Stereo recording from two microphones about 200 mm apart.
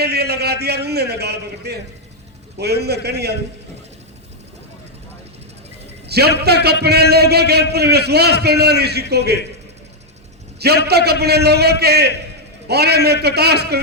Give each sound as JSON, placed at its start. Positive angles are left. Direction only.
{"t": 0.0, "sound": "a man's voice", "side_deg": -55}
{"t": 6.1, "sound": "a man's voice", "side_deg": -55}
{"t": 10.8, "sound": "a man's voice", "side_deg": -55}